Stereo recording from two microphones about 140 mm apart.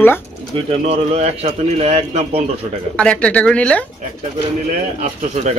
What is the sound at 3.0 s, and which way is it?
Speech, 10° left (ahead or behind).